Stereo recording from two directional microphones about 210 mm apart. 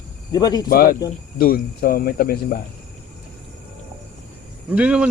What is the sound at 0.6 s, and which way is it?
Speech, 45° left (ahead or behind).